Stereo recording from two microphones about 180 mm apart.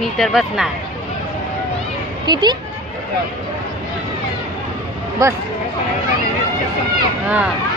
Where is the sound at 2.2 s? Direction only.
25° right (ahead or behind).